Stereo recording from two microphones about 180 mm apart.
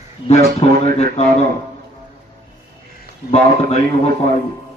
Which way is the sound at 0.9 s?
35° left (ahead or behind).